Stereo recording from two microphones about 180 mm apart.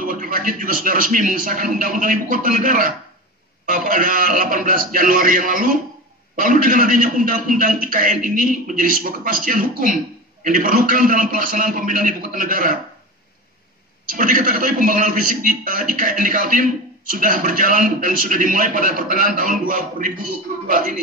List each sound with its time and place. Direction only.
0.0 s a man's voice: 50° right (ahead or behind)
14.0 s a man's voice: 50° right (ahead or behind)